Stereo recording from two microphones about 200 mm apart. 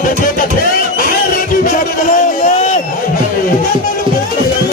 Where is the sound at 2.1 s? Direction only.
40° left (ahead or behind).